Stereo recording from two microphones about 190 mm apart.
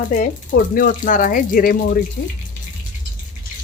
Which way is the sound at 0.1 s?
50° left (ahead or behind).